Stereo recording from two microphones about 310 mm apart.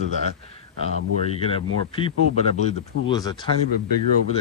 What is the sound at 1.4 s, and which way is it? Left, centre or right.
Speech, centre.